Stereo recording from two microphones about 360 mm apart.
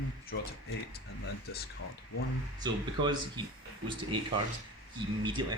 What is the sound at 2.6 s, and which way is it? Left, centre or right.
Speech, centre.